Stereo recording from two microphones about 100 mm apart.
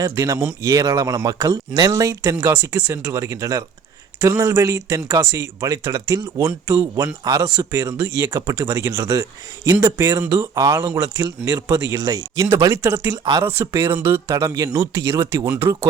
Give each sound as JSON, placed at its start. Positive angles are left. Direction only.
{"t": 0.0, "sound": "a man's voice", "side_deg": -30}